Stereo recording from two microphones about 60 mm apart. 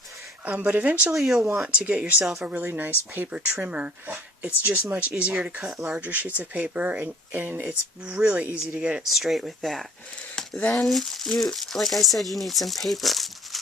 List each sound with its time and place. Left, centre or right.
0.4 s speech: right
1.1 s speech: centre
1.6 s speech: right
2.2 s speech: centre
2.5 s speech: right
5.6 s speech: centre
6.0 s speech: right
8.0 s speech: centre
9.0 s speech: centre
10.8 s speech: centre